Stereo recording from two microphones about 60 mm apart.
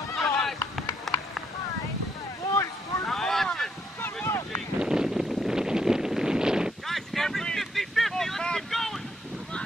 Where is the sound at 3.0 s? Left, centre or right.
Centre.